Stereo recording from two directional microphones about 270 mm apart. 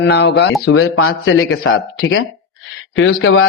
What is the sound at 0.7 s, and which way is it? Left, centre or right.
A man's voice, left.